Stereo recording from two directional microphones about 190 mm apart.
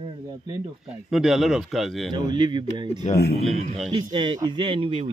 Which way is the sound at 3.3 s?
35° right (ahead or behind).